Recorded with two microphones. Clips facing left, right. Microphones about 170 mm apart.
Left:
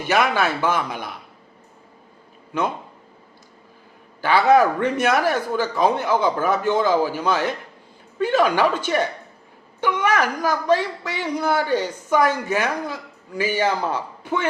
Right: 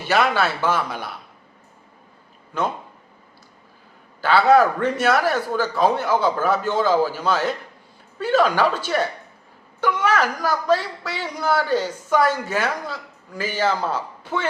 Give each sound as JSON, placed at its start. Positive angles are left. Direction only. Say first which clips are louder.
{"t": 0.0, "sound": "a woman's voice", "louder": "even", "side_deg": 15}
{"t": 4.2, "sound": "a woman's voice", "louder": "even", "side_deg": 15}